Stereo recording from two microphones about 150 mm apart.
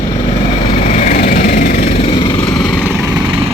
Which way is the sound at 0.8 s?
55° left (ahead or behind).